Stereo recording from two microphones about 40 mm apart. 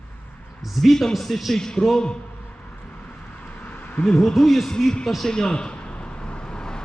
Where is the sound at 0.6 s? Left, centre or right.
Centre.